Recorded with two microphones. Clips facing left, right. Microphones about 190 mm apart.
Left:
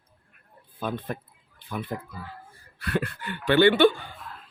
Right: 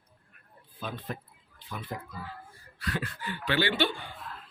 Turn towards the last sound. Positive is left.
turn(degrees=55)  # may be behind; listen again after turning